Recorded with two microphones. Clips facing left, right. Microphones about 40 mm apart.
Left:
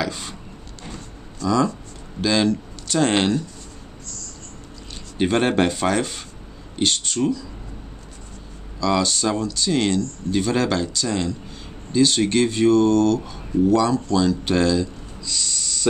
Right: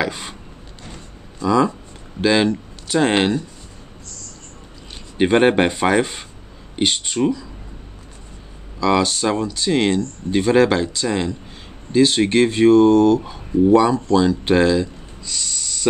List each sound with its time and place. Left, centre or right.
0.0 s speech: right
0.9 s a sound: centre
2.2 s speech: centre
5.1 s speech: right
8.7 s speech: right
15.2 s snort: centre